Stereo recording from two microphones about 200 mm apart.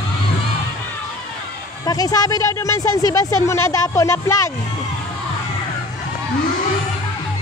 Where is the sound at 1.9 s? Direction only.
20° left (ahead or behind).